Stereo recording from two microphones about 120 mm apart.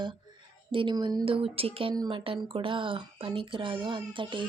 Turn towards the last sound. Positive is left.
turn(degrees=-45)  # may be behind; listen again after turning